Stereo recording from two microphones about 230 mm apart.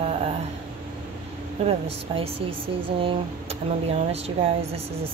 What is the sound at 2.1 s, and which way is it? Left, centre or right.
A woman's voice, right.